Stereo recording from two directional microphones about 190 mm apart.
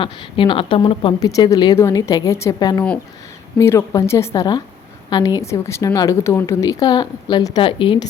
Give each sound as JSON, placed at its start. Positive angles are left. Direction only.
{"t": 0.0, "sound": "a woman's voice", "side_deg": 25}